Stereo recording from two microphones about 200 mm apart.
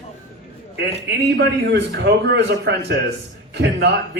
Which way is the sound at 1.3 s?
60° right (ahead or behind).